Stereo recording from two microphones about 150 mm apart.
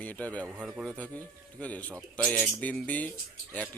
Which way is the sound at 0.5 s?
5° right (ahead or behind).